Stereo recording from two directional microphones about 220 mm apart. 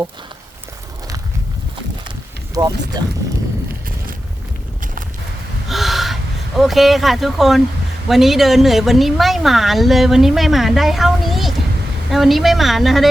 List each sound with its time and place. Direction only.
2.6 s speech: 15° right (ahead or behind)
5.6 s gasp: centre (ahead or behind)
6.6 s a woman's voice: centre (ahead or behind)